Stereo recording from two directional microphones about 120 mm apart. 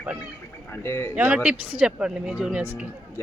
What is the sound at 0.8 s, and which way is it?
Speech, 20° left (ahead or behind).